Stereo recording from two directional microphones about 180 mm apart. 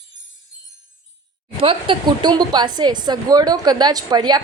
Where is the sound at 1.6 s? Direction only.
25° right (ahead or behind).